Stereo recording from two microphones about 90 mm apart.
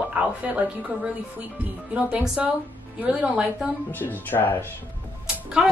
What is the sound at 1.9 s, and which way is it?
A woman's voice, 15° right (ahead or behind).